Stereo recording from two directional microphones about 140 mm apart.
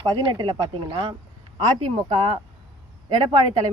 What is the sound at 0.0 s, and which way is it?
Speech, 40° right (ahead or behind).